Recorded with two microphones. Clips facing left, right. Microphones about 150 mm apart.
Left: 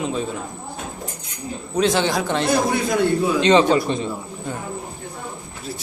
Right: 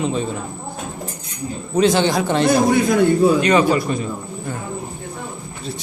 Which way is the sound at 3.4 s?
25° left (ahead or behind).